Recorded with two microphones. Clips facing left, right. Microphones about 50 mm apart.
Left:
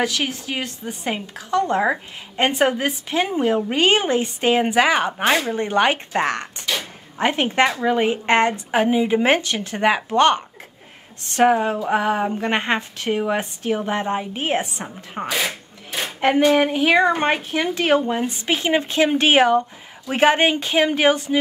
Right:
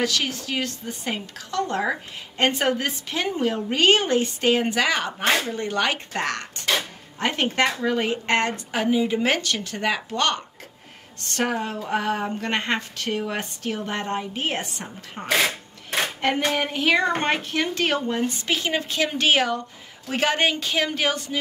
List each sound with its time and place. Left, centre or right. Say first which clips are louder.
0.0 s speech: left 2 dB; centre